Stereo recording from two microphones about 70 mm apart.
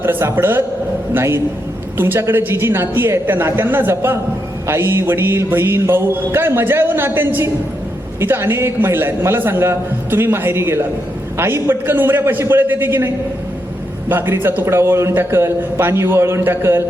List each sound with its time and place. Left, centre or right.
0.0 s a man's voice: right
14.1 s a man's voice: right